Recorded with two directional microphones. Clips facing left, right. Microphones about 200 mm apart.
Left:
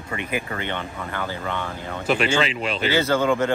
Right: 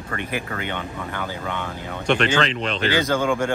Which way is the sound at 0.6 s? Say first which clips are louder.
Even; 10° right (ahead or behind).